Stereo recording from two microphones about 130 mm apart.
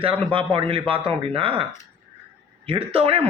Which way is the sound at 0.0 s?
40° right (ahead or behind).